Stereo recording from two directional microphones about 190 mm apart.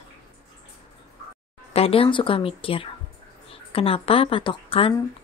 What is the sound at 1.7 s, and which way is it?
A woman's voice, 30° left (ahead or behind).